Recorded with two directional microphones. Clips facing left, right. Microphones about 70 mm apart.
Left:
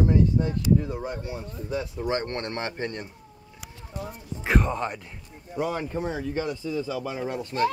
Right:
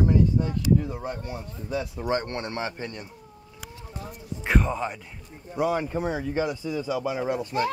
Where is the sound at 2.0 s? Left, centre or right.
Centre.